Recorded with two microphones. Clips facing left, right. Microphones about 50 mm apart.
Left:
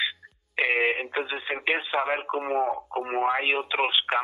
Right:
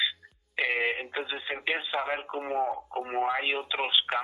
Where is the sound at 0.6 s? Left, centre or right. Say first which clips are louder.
Left 4 dB; centre.